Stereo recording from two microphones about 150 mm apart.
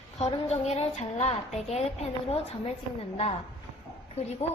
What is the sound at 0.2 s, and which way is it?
A woman's voice, 45° left (ahead or behind).